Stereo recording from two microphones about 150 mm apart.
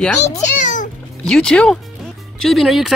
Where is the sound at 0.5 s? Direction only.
60° left (ahead or behind).